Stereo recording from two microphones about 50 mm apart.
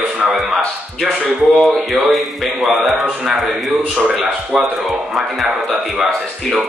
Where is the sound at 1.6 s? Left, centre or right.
Centre.